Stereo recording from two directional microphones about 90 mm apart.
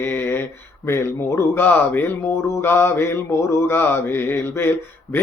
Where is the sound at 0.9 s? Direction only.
25° left (ahead or behind).